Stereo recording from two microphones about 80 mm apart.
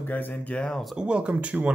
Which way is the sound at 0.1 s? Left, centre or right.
Left.